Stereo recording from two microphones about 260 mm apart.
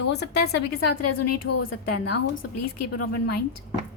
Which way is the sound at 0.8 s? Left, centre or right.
Left.